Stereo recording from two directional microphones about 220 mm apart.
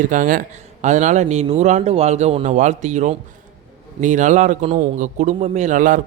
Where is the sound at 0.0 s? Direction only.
35° right (ahead or behind).